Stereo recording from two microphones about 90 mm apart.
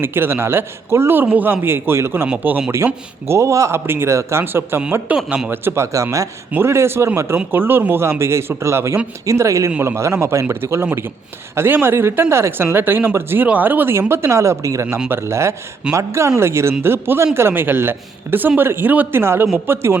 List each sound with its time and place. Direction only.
0.0 s speech: 25° right (ahead or behind)
5.1 s speech: 5° right (ahead or behind)
5.5 s speech: 25° right (ahead or behind)